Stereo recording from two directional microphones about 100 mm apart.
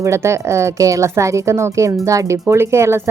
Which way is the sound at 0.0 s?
30° right (ahead or behind).